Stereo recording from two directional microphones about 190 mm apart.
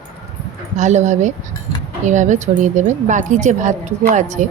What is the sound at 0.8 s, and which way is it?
A woman's voice, 40° right (ahead or behind).